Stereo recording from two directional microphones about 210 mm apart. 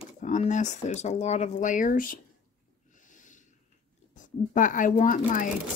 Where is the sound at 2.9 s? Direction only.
35° left (ahead or behind).